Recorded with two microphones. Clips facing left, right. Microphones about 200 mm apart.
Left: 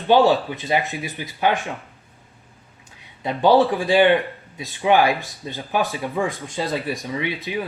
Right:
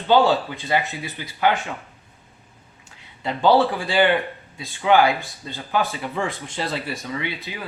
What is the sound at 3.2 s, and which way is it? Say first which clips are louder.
Speech: left 2 dB; 15° left (ahead or behind).